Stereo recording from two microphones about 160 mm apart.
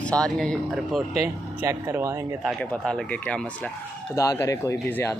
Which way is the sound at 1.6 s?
15° right (ahead or behind).